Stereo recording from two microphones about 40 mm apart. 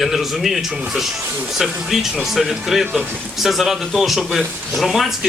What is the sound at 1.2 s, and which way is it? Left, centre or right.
Speech, right.